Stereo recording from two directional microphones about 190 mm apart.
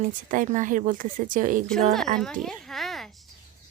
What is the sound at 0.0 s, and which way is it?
Speech, 45° right (ahead or behind).